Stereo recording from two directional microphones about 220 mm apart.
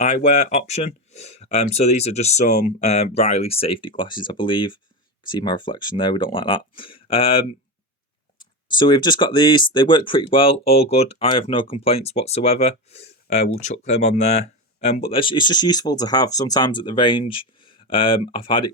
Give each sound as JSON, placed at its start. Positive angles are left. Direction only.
{"t": 0.0, "sound": "speech", "side_deg": 35}